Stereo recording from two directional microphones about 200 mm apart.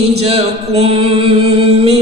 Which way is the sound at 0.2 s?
30° right (ahead or behind).